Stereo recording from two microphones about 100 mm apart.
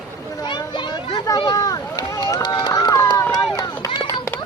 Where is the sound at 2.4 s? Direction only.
50° left (ahead or behind).